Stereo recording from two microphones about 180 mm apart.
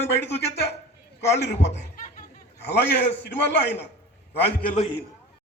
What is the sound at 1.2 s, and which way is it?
Speech, 75° left (ahead or behind).